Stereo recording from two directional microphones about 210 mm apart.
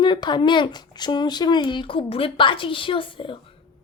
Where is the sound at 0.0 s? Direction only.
20° left (ahead or behind).